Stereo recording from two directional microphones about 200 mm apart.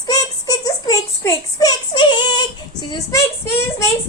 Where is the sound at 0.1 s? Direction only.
20° left (ahead or behind).